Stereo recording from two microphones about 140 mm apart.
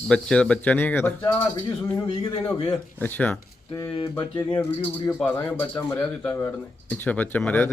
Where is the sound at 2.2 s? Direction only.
40° left (ahead or behind).